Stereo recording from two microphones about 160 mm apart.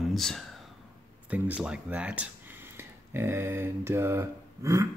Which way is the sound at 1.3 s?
10° right (ahead or behind).